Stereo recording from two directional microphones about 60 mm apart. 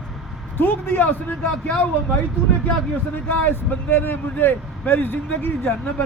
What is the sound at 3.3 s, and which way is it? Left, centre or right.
Speech, left.